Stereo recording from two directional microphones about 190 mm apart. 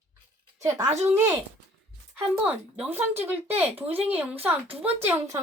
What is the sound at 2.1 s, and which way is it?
A woman's voice, 10° right (ahead or behind).